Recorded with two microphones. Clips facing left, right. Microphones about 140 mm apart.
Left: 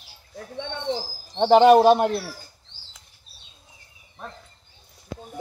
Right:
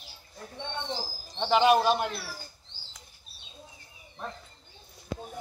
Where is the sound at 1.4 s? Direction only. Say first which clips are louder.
Left 9 dB; 45° left (ahead or behind).